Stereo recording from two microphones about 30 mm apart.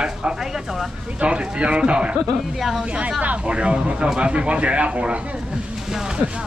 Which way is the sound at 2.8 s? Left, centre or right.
Right.